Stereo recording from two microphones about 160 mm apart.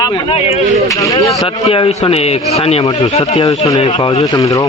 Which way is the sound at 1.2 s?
40° left (ahead or behind).